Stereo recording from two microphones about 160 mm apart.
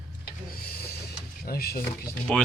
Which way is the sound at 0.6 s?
70° left (ahead or behind).